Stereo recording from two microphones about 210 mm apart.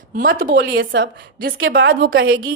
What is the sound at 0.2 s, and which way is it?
A woman's voice, 45° right (ahead or behind).